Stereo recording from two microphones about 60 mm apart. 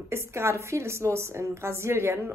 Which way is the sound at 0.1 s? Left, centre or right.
Right.